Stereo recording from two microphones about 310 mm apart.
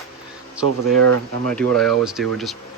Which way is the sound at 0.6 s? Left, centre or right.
Right.